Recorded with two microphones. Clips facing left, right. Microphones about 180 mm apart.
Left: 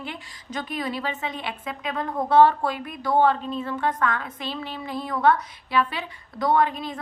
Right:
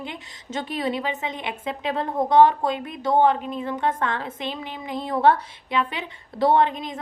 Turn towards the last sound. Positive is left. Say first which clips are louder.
# right 2 dB
turn(degrees=-20)  # may be behind; listen again after turning